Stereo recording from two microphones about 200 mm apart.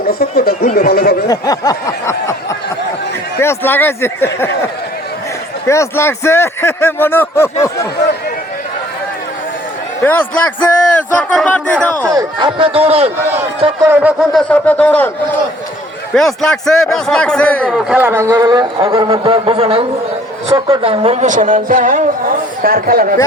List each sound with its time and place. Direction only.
0.1 s speech: 50° left (ahead or behind)
1.3 s a sound: 20° left (ahead or behind)
3.4 s a man's voice: 10° left (ahead or behind)
5.6 s a man's voice: 15° left (ahead or behind)
10.0 s a man's voice: 10° left (ahead or behind)
12.0 s speech: 20° right (ahead or behind)
13.7 s a man's voice: 15° right (ahead or behind); by 23.1 s 45° right (ahead or behind)